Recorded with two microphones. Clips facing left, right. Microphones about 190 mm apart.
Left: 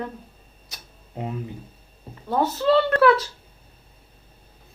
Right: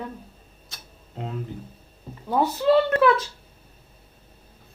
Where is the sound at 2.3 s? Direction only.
15° right (ahead or behind).